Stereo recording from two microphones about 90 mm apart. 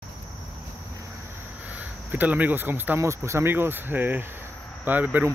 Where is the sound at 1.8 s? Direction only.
20° right (ahead or behind).